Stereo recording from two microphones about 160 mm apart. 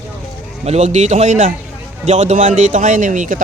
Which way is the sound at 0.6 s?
45° right (ahead or behind).